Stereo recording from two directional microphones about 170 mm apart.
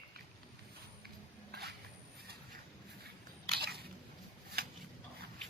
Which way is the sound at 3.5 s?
70° right (ahead or behind).